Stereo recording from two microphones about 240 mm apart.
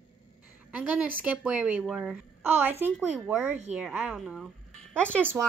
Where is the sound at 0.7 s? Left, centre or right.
Centre.